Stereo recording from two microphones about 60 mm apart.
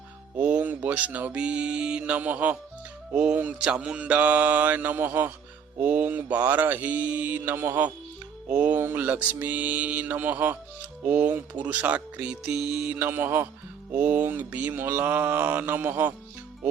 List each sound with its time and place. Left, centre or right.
0.4 s speech: right
7.5 s mantra: right
8.4 s speech: right
13.0 s mantra: right